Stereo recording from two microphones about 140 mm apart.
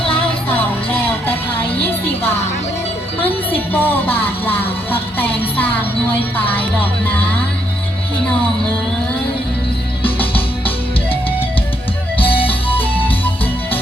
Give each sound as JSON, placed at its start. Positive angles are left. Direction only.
{"t": 0.0, "sound": "music", "side_deg": 40}
{"t": 1.3, "sound": "music", "side_deg": 15}
{"t": 3.7, "sound": "music", "side_deg": 15}
{"t": 10.0, "sound": "music", "side_deg": 15}
{"t": 12.1, "sound": "music", "side_deg": 10}